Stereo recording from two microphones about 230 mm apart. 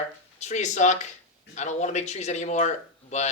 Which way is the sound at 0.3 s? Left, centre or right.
Left.